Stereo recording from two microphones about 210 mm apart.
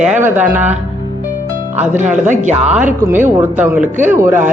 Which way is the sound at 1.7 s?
5° right (ahead or behind).